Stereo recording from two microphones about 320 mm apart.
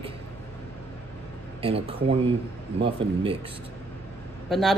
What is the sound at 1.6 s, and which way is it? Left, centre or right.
Speech, centre.